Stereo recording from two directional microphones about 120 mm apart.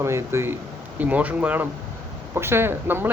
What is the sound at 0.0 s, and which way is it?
A man's voice, 20° right (ahead or behind).